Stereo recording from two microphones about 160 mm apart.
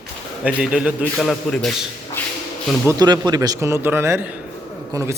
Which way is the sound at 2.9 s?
25° right (ahead or behind).